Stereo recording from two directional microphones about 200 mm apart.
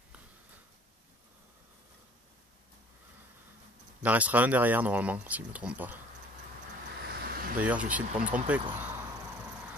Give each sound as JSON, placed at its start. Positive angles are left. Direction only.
{"t": 4.0, "sound": "speech", "side_deg": -5}
{"t": 7.0, "sound": "vehicle", "side_deg": -50}
{"t": 7.6, "sound": "speech", "side_deg": -5}